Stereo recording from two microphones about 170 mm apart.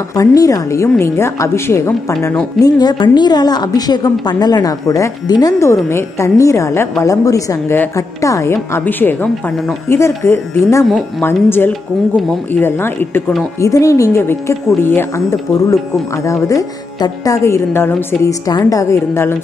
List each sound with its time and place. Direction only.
0.1 s a woman's voice: 20° left (ahead or behind)
10.9 s speech: centre (ahead or behind)
11.2 s a woman's voice: 15° left (ahead or behind)
12.2 s speech: centre (ahead or behind)
12.6 s a woman's voice: 15° left (ahead or behind)
16.3 s a woman's voice: 20° left (ahead or behind)